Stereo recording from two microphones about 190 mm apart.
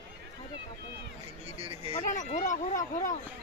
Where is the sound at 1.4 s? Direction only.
30° right (ahead or behind).